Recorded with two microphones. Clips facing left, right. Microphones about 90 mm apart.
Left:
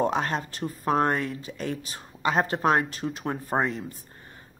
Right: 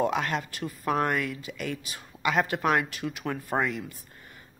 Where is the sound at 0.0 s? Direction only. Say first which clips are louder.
Left 1 dB; 35° left (ahead or behind).